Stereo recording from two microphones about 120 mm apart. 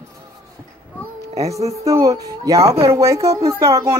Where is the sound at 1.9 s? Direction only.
30° right (ahead or behind).